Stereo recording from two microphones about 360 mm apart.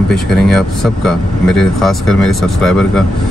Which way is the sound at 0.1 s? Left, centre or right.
Centre.